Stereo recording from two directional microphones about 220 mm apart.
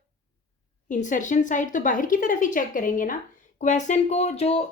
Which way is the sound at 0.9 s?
35° left (ahead or behind).